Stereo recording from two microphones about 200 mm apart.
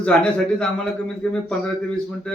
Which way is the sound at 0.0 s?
5° left (ahead or behind).